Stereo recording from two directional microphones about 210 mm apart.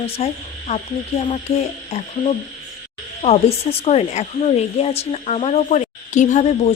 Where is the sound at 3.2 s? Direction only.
30° left (ahead or behind).